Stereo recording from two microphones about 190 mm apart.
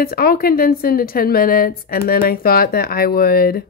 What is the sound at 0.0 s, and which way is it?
Speech, 50° left (ahead or behind).